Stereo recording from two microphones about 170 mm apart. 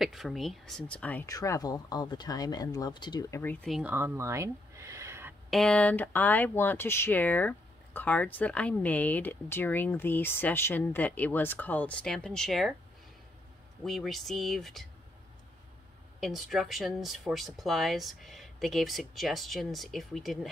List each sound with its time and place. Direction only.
0.0 s speech: centre (ahead or behind)
1.2 s speech: 20° left (ahead or behind)
3.6 s speech: centre (ahead or behind)
3.9 s a sound: 15° right (ahead or behind)
5.5 s speech: 5° left (ahead or behind)
13.8 s speech: centre (ahead or behind)
16.2 s speech: centre (ahead or behind)